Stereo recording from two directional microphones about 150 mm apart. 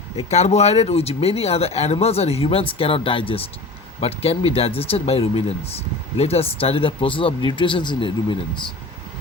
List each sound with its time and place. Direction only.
0.2 s speech: 45° left (ahead or behind)